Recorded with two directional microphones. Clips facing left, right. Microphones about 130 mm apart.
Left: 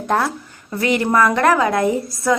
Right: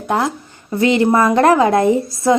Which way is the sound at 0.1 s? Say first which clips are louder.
Right 1 dB; 20° right (ahead or behind).